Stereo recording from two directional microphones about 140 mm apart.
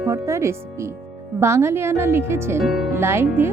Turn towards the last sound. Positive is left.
turn(degrees=-20)  # may be behind; listen again after turning